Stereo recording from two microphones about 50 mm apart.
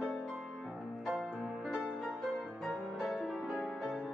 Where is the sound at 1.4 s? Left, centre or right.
Centre.